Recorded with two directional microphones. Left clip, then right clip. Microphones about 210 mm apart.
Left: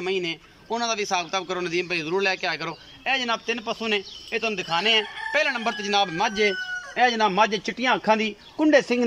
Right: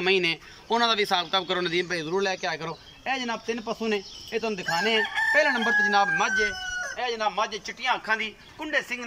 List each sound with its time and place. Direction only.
0.0 s a man's voice: 10° left (ahead or behind)
6.1 s speech: 35° left (ahead or behind)
7.0 s a man's voice: 50° left (ahead or behind)